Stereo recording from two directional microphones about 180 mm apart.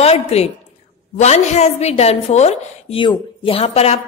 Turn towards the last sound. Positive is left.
turn(degrees=35)  # may be behind; listen again after turning